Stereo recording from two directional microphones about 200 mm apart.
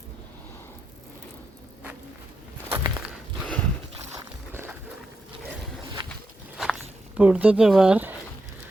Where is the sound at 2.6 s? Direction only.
15° right (ahead or behind).